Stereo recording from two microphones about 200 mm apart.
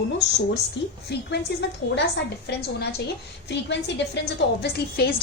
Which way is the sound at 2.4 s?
55° left (ahead or behind).